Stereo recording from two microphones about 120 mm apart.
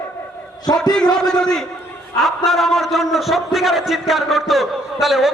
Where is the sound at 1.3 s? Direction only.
5° left (ahead or behind).